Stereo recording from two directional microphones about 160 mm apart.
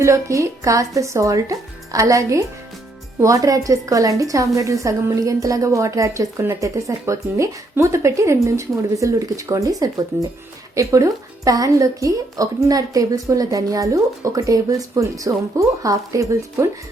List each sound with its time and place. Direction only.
0.0 s a woman's voice: 20° right (ahead or behind)